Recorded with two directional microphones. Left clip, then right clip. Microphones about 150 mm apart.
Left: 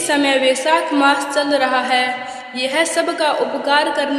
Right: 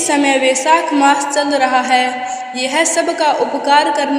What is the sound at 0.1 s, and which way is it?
A man's voice, 10° right (ahead or behind).